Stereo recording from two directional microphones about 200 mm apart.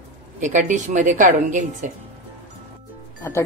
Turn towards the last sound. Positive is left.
turn(degrees=15)  # may be behind; listen again after turning